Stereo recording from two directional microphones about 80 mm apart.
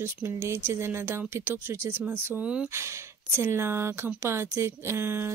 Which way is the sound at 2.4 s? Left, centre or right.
Centre.